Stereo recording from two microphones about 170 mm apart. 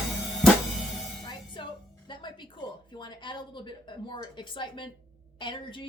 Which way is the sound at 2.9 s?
25° left (ahead or behind).